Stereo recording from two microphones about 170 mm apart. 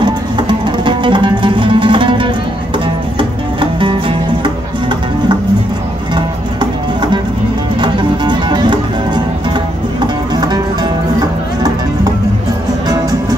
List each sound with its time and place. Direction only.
0.0 s music: 25° right (ahead or behind)
6.1 s music: 25° right (ahead or behind)